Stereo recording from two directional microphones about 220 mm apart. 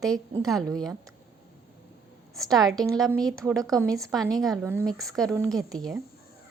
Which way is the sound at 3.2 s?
15° right (ahead or behind).